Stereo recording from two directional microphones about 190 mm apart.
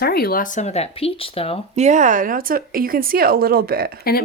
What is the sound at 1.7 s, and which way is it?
Speech, 40° right (ahead or behind).